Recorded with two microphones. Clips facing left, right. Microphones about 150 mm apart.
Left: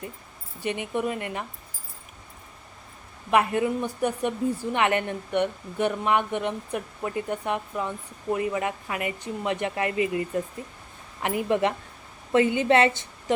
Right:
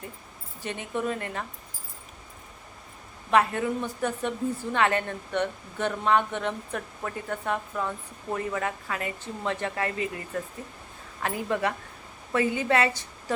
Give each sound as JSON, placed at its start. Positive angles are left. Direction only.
{"t": 0.6, "sound": "a woman's voice", "side_deg": 15}
{"t": 3.2, "sound": "a woman's voice", "side_deg": 15}